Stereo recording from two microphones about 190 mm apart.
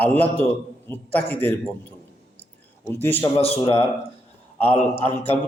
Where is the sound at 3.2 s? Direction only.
25° left (ahead or behind).